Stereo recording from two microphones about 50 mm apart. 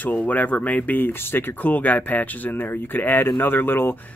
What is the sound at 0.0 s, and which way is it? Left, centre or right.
Speech, left.